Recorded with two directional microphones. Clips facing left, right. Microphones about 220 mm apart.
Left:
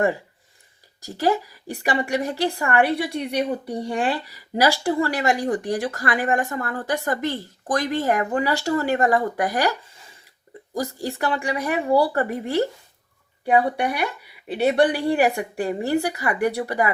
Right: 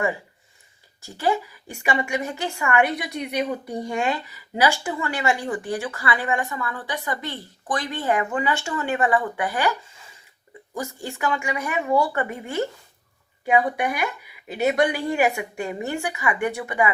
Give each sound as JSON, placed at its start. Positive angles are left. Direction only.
{"t": 1.0, "sound": "speech", "side_deg": 40}